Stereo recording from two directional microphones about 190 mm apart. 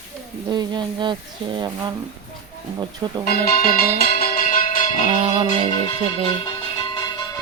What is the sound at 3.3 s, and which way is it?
Music, 50° left (ahead or behind).